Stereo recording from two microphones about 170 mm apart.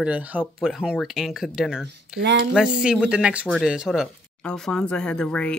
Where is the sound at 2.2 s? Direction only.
80° right.